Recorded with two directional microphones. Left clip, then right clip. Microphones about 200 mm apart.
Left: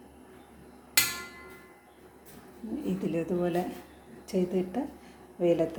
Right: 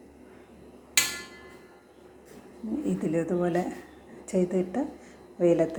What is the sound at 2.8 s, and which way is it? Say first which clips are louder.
Speech: right 3 dB; 5° right (ahead or behind).